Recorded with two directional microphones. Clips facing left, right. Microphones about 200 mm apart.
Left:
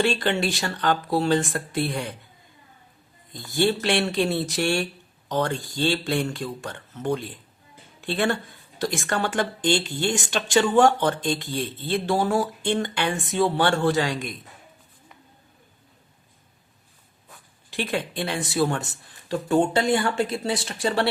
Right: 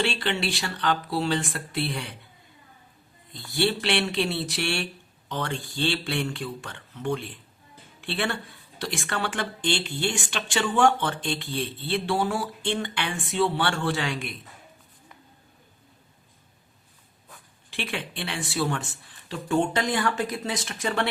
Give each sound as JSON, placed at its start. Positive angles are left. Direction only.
{"t": 0.0, "sound": "speech", "side_deg": 45}
{"t": 3.3, "sound": "speech", "side_deg": 45}
{"t": 17.7, "sound": "speech", "side_deg": 40}